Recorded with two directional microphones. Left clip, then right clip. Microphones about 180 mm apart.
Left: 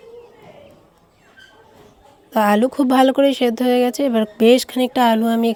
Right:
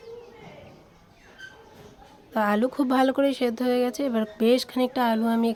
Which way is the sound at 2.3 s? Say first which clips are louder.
Left 8 dB; 30° left (ahead or behind).